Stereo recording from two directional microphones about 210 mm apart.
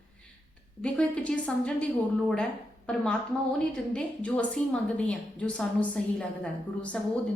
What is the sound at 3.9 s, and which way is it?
A woman's voice, 5° left (ahead or behind).